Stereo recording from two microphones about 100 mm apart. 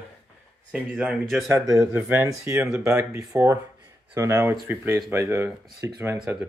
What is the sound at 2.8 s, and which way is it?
Speech, 30° right (ahead or behind).